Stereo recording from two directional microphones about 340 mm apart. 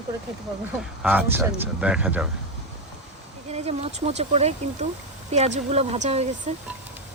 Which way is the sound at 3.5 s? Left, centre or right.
Centre.